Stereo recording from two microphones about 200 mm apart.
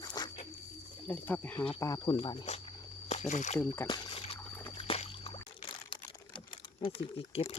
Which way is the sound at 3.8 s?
25° left (ahead or behind).